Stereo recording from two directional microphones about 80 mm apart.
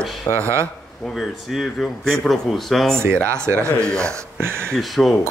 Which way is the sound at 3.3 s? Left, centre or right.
Right.